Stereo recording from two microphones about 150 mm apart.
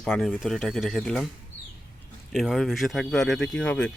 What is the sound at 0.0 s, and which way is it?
Speech, 5° left (ahead or behind).